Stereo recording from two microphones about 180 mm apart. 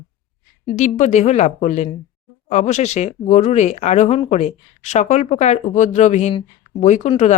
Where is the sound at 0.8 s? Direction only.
40° left (ahead or behind).